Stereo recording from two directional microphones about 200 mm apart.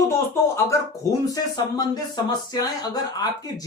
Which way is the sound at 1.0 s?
15° left (ahead or behind).